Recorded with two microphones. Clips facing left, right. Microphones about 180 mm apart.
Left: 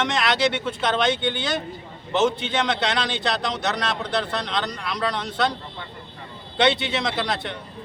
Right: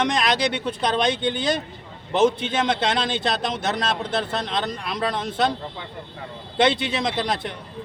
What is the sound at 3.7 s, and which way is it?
Speech, 25° right (ahead or behind).